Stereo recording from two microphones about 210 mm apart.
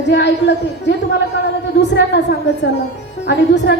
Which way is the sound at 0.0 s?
55° left (ahead or behind).